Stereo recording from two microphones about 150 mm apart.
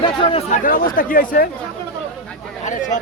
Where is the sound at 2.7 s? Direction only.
55° left (ahead or behind).